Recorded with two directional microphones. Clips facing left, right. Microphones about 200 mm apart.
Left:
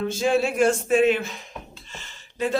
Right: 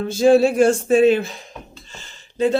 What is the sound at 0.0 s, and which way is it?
Speech, 35° right (ahead or behind).